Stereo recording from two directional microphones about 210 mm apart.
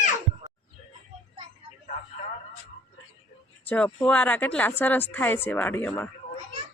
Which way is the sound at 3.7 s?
5° left (ahead or behind).